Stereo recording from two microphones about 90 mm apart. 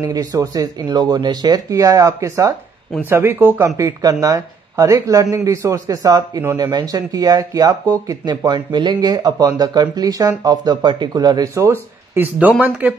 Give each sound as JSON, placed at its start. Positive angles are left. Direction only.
{"t": 0.0, "sound": "speech", "side_deg": -40}
{"t": 0.8, "sound": "speech", "side_deg": -50}
{"t": 3.6, "sound": "speech", "side_deg": -35}
{"t": 8.5, "sound": "speech", "side_deg": -55}
{"t": 12.2, "sound": "speech", "side_deg": -20}